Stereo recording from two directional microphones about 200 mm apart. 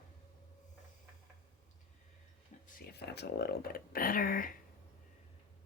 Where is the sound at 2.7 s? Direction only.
55° left (ahead or behind).